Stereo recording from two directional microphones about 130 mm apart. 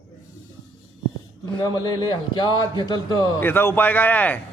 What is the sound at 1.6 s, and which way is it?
A man's voice, 30° left (ahead or behind).